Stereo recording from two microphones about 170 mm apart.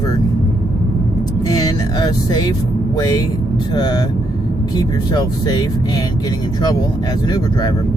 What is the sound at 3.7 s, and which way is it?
Speech, 25° left (ahead or behind).